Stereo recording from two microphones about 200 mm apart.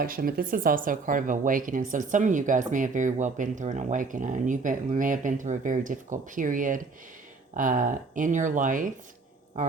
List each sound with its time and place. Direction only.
0.0 s speech: 45° right (ahead or behind)